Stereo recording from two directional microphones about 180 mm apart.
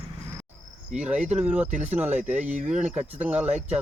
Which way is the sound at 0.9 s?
5° right (ahead or behind).